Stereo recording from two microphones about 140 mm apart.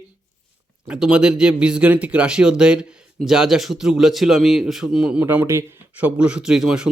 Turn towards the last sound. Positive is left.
turn(degrees=-5)  # may be behind; listen again after turning